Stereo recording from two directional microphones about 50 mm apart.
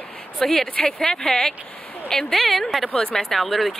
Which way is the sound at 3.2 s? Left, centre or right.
Centre.